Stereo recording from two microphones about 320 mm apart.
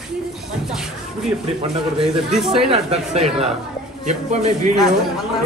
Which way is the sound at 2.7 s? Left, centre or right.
Centre.